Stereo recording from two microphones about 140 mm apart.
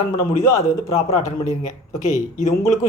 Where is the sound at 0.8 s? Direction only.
45° left (ahead or behind).